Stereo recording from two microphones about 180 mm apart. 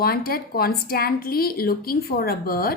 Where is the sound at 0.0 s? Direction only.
55° left (ahead or behind).